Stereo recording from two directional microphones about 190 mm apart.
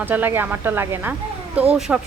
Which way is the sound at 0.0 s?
10° right (ahead or behind).